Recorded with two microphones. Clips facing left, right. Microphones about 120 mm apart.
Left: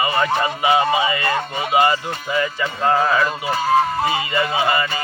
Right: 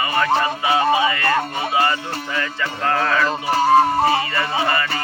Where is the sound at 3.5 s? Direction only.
35° right (ahead or behind).